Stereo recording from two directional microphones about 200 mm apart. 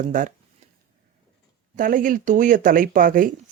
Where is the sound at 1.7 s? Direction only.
40° right (ahead or behind).